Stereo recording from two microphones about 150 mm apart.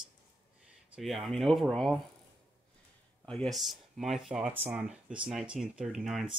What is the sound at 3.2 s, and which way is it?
Speech, 5° left (ahead or behind).